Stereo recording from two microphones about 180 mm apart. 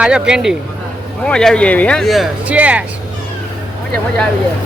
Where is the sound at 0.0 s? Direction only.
5° right (ahead or behind).